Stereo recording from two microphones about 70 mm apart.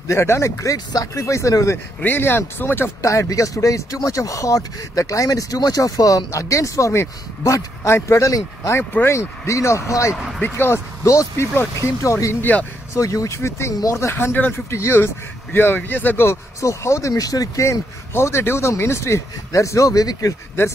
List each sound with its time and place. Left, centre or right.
0.1 s speech: left
0.7 s speech: left
2.0 s speech: left
3.1 s speech: left
10.4 s speech: left
11.1 s speech: left
12.4 s speech: left
12.9 s speech: left
16.6 s speech: left
17.1 s speech: left